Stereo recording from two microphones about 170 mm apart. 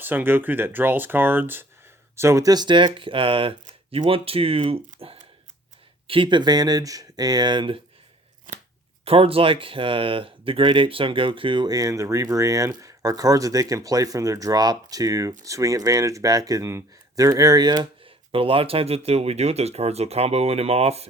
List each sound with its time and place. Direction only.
0.0 s speech: 10° right (ahead or behind); by 7.8 s 25° right (ahead or behind)
9.0 s speech: 35° right (ahead or behind)